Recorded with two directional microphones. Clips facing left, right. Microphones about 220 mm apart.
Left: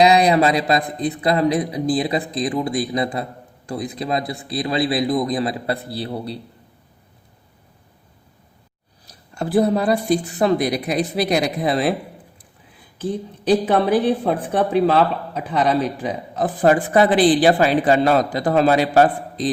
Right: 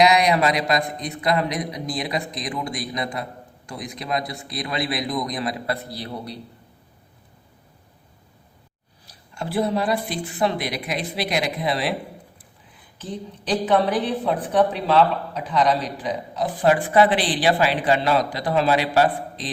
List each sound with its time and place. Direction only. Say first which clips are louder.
0.0 s a man's voice: left 3 dB; 30° left (ahead or behind)
9.3 s a man's voice: left 6 dB; 40° left (ahead or behind)
13.0 s a man's voice: left 7 dB; 45° left (ahead or behind)